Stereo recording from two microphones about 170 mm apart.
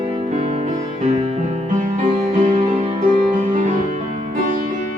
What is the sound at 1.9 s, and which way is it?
Music, 45° right (ahead or behind).